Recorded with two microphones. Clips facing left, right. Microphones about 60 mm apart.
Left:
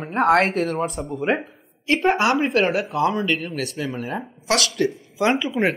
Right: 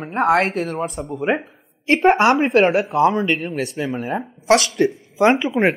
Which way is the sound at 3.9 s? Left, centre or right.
Centre.